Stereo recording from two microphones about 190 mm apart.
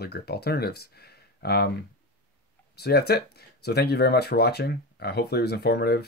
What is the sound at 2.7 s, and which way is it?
Speech, 60° left (ahead or behind).